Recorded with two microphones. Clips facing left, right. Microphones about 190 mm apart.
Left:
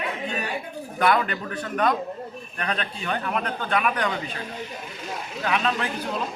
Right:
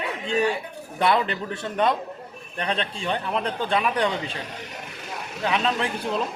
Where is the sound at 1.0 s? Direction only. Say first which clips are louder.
Even; 25° right (ahead or behind).